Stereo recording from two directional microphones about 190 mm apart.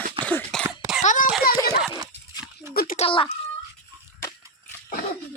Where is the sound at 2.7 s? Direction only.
50° left (ahead or behind).